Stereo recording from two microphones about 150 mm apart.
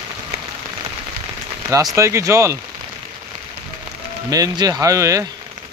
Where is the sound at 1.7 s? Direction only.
20° right (ahead or behind).